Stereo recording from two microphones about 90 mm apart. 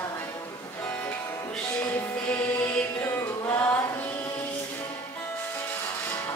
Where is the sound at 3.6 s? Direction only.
25° left (ahead or behind).